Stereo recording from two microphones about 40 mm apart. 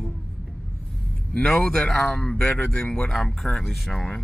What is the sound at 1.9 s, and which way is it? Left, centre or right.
A man's voice, left.